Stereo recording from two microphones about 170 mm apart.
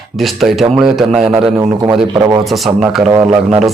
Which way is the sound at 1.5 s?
20° right (ahead or behind).